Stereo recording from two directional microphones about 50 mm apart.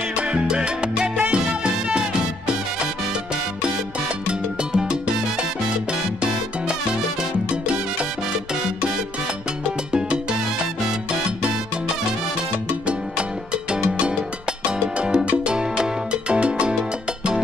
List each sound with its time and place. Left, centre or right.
0.1 s salsa music: centre
1.3 s music: right
4.3 s salsa music: centre
14.6 s music: right